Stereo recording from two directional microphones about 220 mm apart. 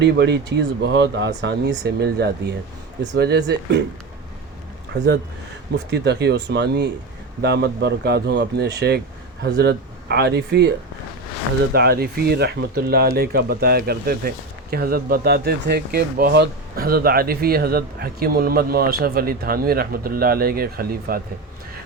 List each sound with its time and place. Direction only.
0.0 s speech: 50° right (ahead or behind)
5.7 s speech: 50° right (ahead or behind)
11.7 s speech: 45° right (ahead or behind)